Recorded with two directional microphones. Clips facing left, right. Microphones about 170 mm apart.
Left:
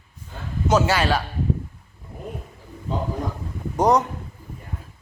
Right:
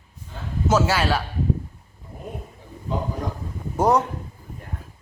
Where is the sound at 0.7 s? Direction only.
5° right (ahead or behind).